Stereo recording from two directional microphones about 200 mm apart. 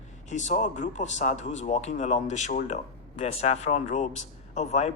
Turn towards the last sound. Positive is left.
turn(degrees=35)  # may be behind; listen again after turning